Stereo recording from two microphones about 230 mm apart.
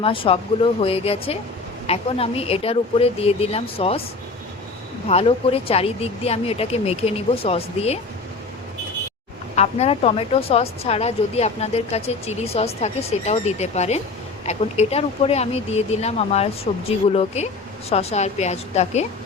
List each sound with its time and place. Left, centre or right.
0.0 s speech: left
5.0 s speech: left
9.6 s speech: left